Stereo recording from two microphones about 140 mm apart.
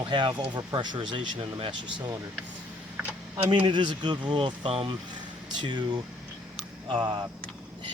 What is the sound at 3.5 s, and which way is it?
Speech, 35° right (ahead or behind).